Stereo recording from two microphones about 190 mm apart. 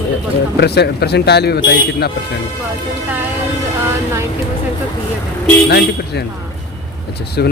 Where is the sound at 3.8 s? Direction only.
15° right (ahead or behind).